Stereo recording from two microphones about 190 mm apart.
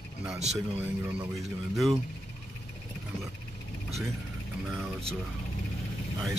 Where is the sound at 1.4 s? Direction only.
Centre (ahead or behind).